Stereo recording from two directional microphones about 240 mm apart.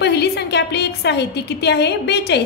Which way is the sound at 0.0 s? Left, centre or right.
Left.